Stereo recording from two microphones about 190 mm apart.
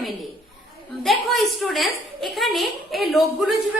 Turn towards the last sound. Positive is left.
turn(degrees=0)  # may be behind; listen again after turning